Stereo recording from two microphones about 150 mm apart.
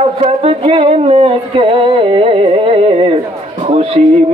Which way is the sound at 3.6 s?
45° right (ahead or behind).